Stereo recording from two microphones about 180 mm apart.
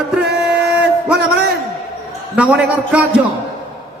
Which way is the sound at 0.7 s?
5° right (ahead or behind).